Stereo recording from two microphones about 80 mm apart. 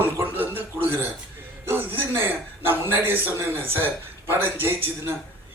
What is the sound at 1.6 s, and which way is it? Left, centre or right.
A man's voice, right.